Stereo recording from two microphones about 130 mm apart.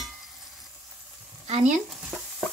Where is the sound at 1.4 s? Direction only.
65° right (ahead or behind).